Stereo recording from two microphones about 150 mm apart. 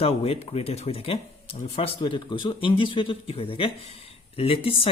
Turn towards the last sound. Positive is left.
turn(degrees=40)  # may be behind; listen again after turning